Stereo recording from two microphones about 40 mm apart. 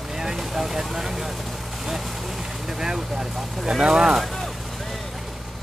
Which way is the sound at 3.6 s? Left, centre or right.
Centre.